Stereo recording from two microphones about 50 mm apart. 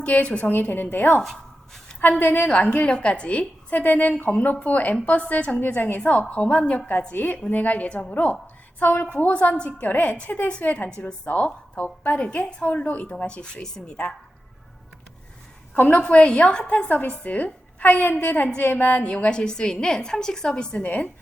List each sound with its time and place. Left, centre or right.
0.0 s a woman's voice: left
0.5 s a woman's voice: left
1.2 s a sound: centre
2.0 s a woman's voice: left
2.5 s a woman's voice: left
5.6 s a woman's voice: left
6.2 s a woman's voice: left
8.8 s a woman's voice: left
9.3 s a woman's voice: left
15.7 s a woman's voice: left
16.0 s a woman's voice: left
19.0 s a woman's voice: left
20.8 s a woman's voice: left